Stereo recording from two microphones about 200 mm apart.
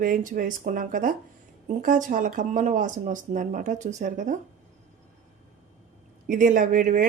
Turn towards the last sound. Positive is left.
turn(degrees=-40)  # may be behind; listen again after turning